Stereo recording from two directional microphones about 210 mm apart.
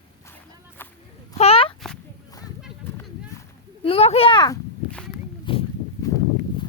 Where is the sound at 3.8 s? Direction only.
30° left (ahead or behind).